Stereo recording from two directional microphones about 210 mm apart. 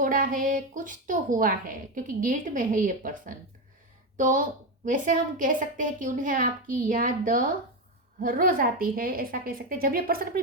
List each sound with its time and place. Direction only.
0.0 s a woman's voice: 40° right (ahead or behind)